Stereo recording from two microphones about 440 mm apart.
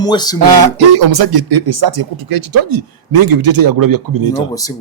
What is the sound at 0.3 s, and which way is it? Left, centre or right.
Speech, right.